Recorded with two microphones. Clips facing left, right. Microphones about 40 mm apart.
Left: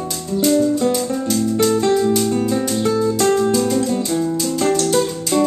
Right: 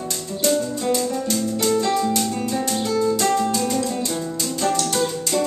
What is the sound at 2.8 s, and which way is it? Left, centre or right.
Music, left.